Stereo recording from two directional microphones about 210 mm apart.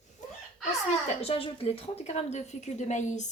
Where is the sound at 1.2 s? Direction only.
25° left (ahead or behind).